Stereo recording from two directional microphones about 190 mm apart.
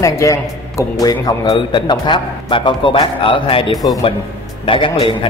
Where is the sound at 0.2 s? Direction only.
15° left (ahead or behind).